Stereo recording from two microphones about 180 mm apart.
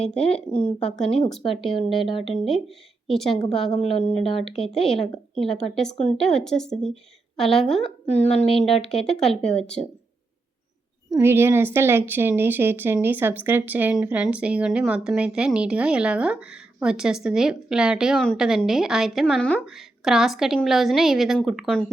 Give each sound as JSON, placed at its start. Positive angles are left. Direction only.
{"t": 0.5, "sound": "a woman's voice", "side_deg": 5}
{"t": 2.0, "sound": "speech", "side_deg": 30}
{"t": 2.2, "sound": "a woman's voice", "side_deg": 0}
{"t": 3.6, "sound": "a woman's voice", "side_deg": 30}
{"t": 4.6, "sound": "a woman's voice", "side_deg": 0}
{"t": 6.1, "sound": "a woman's voice", "side_deg": 0}
{"t": 7.8, "sound": "a woman's voice", "side_deg": 35}
{"t": 9.0, "sound": "a woman's voice", "side_deg": 5}
{"t": 11.1, "sound": "a woman's voice", "side_deg": -15}